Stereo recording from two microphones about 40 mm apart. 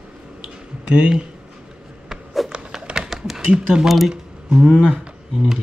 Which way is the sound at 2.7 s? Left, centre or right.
Centre.